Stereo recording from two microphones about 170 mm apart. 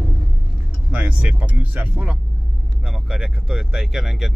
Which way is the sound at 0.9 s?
5° right (ahead or behind).